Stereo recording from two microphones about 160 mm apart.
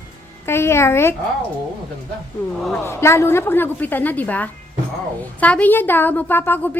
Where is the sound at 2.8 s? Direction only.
15° left (ahead or behind).